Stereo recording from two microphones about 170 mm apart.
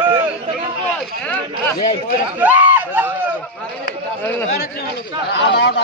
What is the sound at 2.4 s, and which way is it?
Speech, 10° right (ahead or behind).